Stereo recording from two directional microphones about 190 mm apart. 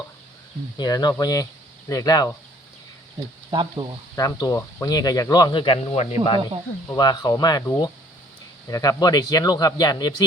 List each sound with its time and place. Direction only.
0.8 s speech: 20° left (ahead or behind)
3.5 s speech: 25° right (ahead or behind)
4.1 s speech: 20° left (ahead or behind)
6.8 s speech: 20° left (ahead or behind)